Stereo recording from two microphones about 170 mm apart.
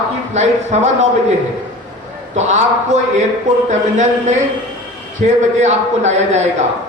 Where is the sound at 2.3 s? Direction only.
45° right (ahead or behind).